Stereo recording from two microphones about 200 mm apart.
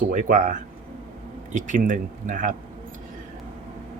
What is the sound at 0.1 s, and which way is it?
Speech, 40° right (ahead or behind).